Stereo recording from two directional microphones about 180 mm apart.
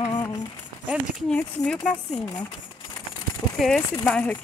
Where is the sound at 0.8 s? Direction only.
Centre (ahead or behind).